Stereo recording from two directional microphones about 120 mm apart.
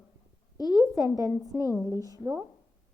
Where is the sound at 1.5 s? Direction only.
10° right (ahead or behind).